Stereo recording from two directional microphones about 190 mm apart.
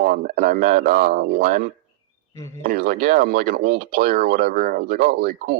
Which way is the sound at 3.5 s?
35° right (ahead or behind).